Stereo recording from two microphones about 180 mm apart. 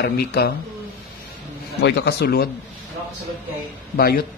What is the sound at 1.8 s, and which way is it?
Speech, 70° left (ahead or behind).